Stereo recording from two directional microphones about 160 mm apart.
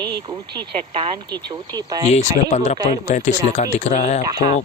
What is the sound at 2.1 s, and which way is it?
Speech, 45° left (ahead or behind).